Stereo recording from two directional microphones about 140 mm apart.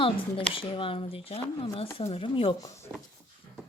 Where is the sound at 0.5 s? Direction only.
40° left (ahead or behind).